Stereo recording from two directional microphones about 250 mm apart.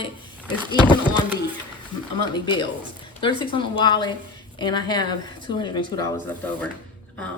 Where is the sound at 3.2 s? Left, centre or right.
Centre.